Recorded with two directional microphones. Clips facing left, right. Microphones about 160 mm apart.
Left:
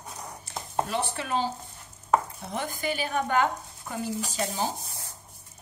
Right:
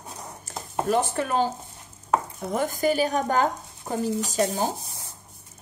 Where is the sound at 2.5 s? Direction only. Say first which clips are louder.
Right 8 dB; 45° right (ahead or behind).